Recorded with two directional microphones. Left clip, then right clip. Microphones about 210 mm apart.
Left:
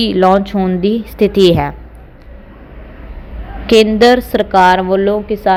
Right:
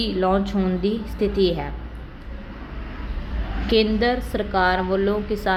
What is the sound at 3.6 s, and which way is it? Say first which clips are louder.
A woman's voice: left 12 dB; 35° left (ahead or behind).